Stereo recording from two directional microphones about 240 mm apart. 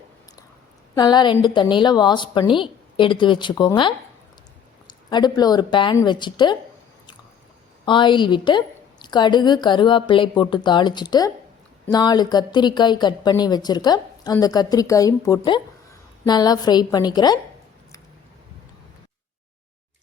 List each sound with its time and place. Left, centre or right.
0.9 s a woman's voice: centre
7.9 s a woman's voice: centre